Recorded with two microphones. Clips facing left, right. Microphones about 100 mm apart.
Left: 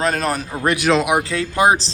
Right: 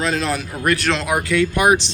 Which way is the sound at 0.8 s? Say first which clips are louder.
Left 5 dB; 5° left (ahead or behind).